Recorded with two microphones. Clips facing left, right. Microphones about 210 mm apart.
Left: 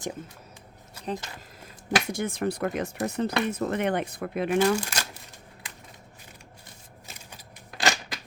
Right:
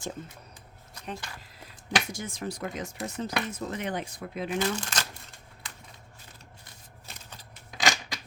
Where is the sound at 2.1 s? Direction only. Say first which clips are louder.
Left 7 dB; 60° left (ahead or behind).